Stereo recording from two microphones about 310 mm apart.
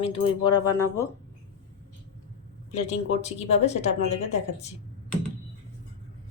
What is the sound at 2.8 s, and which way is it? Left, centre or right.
Speech, left.